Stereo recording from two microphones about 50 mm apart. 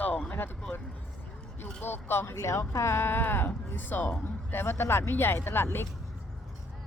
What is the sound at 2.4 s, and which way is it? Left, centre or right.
Speech, left.